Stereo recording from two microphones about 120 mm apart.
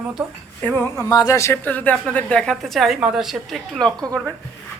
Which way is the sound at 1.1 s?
30° left (ahead or behind).